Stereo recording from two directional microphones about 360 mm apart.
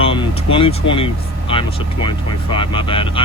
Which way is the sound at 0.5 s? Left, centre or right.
Centre.